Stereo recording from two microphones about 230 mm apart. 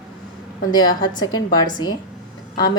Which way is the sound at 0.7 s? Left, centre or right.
Centre.